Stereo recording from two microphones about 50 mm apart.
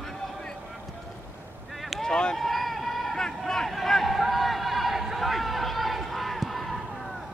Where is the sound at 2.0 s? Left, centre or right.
Centre.